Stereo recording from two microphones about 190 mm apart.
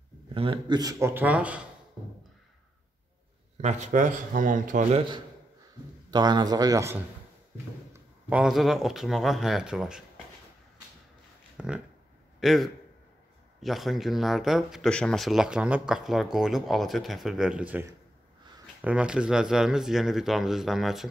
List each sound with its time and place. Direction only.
0.3 s speech: 30° right (ahead or behind); by 1.6 s 5° right (ahead or behind)
3.6 s a man's voice: 35° right (ahead or behind)
6.0 s a man's voice: 20° right (ahead or behind)
8.3 s speech: 5° right (ahead or behind)
11.5 s speech: 5° right (ahead or behind)